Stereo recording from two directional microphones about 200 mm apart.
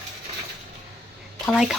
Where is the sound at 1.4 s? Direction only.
Centre (ahead or behind).